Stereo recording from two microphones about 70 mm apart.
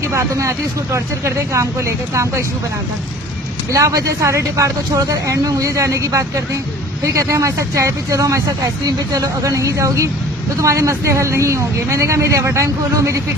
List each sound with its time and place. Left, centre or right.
0.0 s speech: right
3.7 s speech: right